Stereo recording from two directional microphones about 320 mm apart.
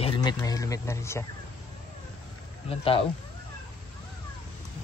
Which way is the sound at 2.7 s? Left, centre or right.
Centre.